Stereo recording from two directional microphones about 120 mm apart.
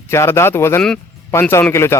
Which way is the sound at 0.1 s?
20° left (ahead or behind).